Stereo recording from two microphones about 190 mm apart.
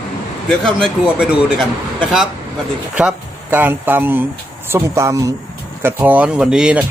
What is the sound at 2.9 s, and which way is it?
Speech, 10° right (ahead or behind).